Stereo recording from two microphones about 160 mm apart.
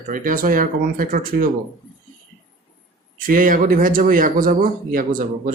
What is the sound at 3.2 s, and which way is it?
Speech, 60° right (ahead or behind).